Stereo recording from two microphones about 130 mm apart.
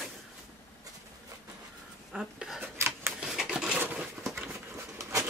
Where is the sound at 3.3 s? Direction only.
5° right (ahead or behind).